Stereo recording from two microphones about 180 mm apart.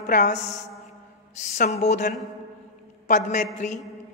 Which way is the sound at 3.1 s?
45° left (ahead or behind).